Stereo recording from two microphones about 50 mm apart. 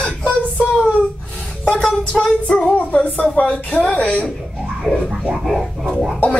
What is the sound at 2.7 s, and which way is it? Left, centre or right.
A woman's voice, left.